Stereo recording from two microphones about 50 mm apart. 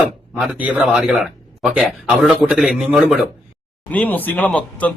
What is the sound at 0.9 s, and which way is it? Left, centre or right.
A man's voice, centre.